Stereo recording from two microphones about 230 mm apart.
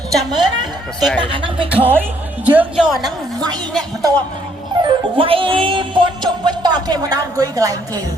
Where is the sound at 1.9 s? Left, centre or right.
Centre.